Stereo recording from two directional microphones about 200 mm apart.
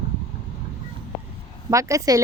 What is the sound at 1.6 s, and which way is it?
Speech, 15° right (ahead or behind).